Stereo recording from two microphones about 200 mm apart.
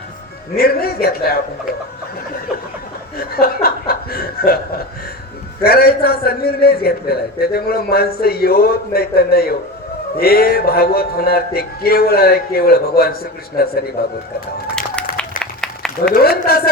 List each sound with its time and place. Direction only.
0.5 s a man's voice: 50° left (ahead or behind)
3.2 s a man's voice: 50° left (ahead or behind)
15.4 s a sound: 5° left (ahead or behind)
16.1 s a man's voice: 50° left (ahead or behind)